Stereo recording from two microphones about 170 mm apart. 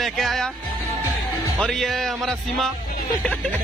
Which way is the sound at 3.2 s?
10° left (ahead or behind).